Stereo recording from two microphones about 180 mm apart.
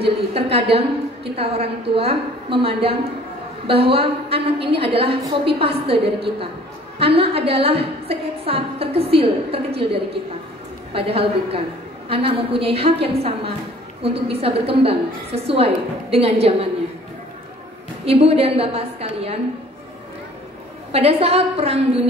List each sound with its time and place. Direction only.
0.0 s a woman's voice: 30° right (ahead or behind)
10.9 s a woman's voice: 30° right (ahead or behind)
18.0 s a woman's voice: 35° right (ahead or behind)
20.9 s a woman's voice: 35° right (ahead or behind)